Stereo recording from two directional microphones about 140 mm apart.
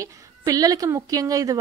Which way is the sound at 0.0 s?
25° right (ahead or behind).